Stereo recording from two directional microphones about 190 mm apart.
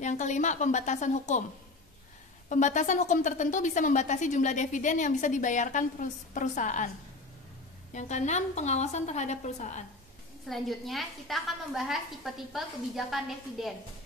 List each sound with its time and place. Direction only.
0.0 s a woman's voice: 40° left (ahead or behind)
2.5 s a woman's voice: 40° left (ahead or behind)
7.9 s a woman's voice: 40° left (ahead or behind)
10.5 s a woman's voice: centre (ahead or behind)